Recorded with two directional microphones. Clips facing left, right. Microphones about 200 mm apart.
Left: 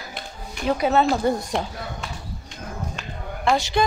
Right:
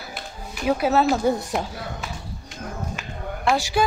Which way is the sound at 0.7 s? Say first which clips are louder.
Even; 5° right (ahead or behind).